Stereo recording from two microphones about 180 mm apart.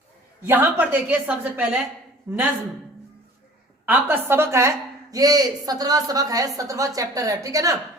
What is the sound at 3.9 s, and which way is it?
A woman's voice, 10° right (ahead or behind).